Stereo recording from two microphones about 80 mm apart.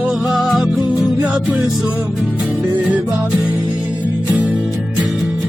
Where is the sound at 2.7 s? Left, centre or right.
Centre.